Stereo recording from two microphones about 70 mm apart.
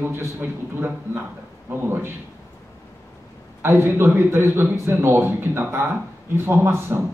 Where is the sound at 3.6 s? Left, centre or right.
Right.